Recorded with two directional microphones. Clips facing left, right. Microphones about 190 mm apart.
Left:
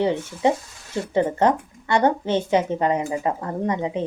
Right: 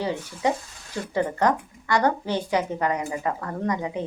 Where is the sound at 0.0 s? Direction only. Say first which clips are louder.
Left 5 dB; 20° left (ahead or behind).